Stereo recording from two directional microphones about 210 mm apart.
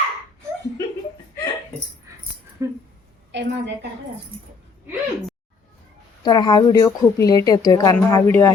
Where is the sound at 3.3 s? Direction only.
60° right (ahead or behind).